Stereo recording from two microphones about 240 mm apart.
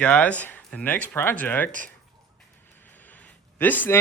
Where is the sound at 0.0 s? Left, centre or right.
Centre.